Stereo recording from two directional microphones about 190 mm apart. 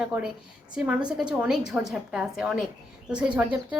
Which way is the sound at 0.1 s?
10° right (ahead or behind).